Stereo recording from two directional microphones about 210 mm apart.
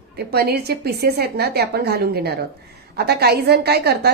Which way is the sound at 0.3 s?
50° right (ahead or behind).